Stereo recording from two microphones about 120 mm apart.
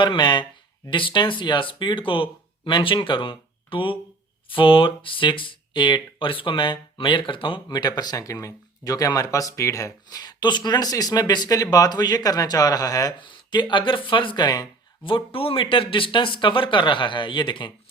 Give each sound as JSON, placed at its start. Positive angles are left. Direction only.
{"t": 0.0, "sound": "speech", "side_deg": 40}